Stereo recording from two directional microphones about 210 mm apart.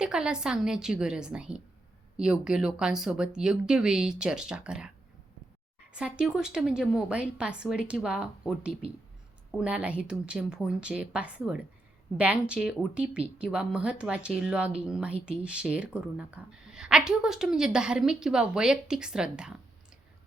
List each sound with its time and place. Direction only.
0.0 s speech: 5° right (ahead or behind)
5.9 s speech: 5° right (ahead or behind)